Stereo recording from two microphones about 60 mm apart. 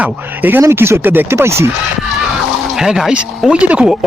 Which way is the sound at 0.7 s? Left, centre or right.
Right.